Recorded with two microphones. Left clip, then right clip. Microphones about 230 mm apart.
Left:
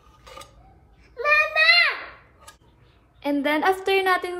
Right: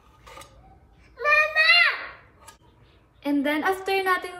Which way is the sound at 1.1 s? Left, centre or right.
Centre.